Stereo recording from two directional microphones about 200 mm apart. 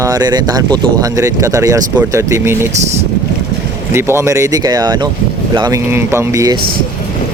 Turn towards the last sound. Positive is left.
turn(degrees=-15)  # may be behind; listen again after turning